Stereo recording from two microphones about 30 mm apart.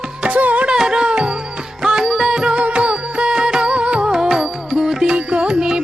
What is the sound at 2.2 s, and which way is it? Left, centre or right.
Music, right.